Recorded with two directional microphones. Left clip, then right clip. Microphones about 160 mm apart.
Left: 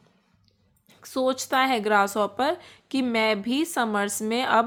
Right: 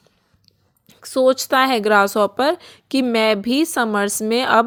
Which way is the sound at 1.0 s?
40° right (ahead or behind).